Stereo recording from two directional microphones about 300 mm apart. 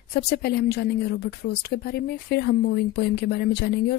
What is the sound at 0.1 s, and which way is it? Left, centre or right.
Speech, left.